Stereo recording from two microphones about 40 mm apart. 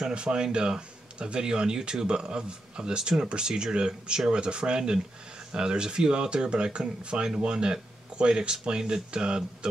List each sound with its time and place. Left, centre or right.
0.1 s speech: right